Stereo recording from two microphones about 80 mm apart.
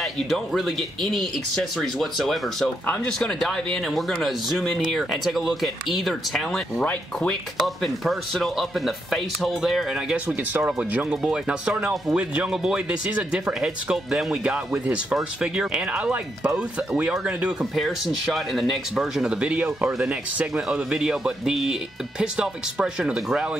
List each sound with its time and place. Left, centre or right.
0.0 s speech: centre
10.1 s speech: centre
17.7 s speech: centre
19.4 s speech: centre